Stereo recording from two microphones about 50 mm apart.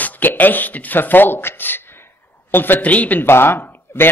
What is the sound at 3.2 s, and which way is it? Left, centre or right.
Speech, left.